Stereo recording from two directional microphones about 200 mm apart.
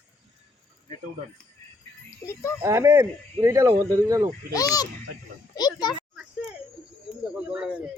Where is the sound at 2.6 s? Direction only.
15° right (ahead or behind).